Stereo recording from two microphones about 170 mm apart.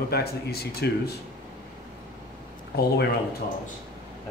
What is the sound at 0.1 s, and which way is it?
Speech, 70° left (ahead or behind).